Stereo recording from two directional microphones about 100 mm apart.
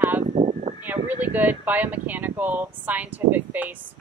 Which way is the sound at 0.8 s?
15° right (ahead or behind).